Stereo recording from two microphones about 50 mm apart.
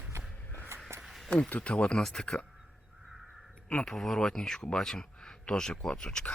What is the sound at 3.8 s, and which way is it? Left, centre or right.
Speech, centre.